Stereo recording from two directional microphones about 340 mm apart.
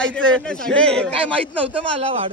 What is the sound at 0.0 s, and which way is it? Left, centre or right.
Speech, centre.